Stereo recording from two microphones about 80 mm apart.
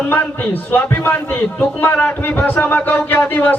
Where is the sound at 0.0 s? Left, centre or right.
Left.